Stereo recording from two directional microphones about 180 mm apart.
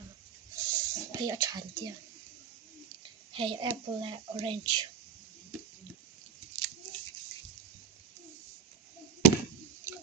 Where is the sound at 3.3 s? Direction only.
30° right (ahead or behind).